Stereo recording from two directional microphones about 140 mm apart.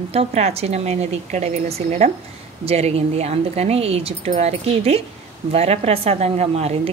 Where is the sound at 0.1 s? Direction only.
50° right (ahead or behind).